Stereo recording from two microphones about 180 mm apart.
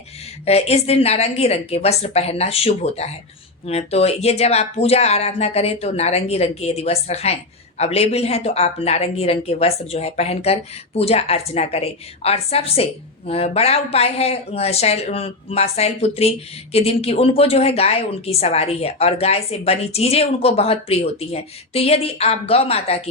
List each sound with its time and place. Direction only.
0.4 s a woman's voice: 35° left (ahead or behind)